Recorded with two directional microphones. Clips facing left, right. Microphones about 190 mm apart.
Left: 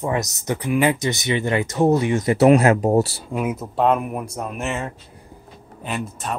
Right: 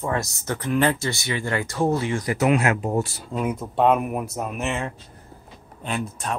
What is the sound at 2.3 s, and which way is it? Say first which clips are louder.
Speech: left 7 dB; 35° left (ahead or behind).